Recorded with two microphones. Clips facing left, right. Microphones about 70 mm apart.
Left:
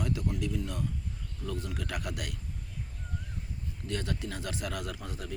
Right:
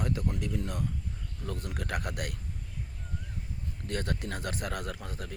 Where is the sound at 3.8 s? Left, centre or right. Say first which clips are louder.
Right 1 dB; right.